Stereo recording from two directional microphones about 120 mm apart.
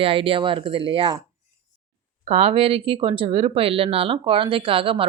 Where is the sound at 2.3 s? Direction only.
55° right (ahead or behind).